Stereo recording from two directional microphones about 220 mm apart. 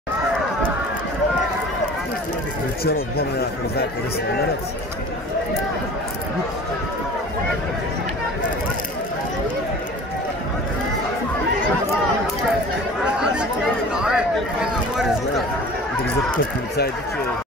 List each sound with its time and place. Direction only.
2.8 s speech: 45° left (ahead or behind)
13.0 s chatter: 5° right (ahead or behind)
13.9 s a sound: 5° right (ahead or behind)